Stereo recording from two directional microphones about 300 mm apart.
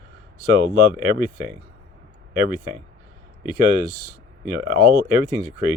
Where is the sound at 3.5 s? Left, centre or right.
Right.